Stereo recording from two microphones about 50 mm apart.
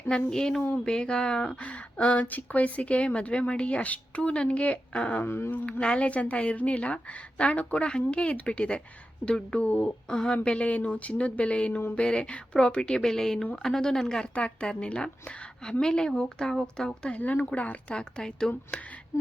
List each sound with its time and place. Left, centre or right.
0.3 s a woman's voice: centre
1.5 s speech: left
5.2 s speech: left
5.8 s a woman's voice: left
9.6 s speech: left
10.2 s speech: centre
13.0 s a woman's voice: centre
14.3 s a woman's voice: left
17.2 s speech: left
17.9 s a woman's voice: centre